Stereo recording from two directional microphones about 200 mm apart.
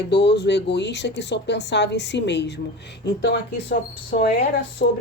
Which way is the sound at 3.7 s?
45° left (ahead or behind).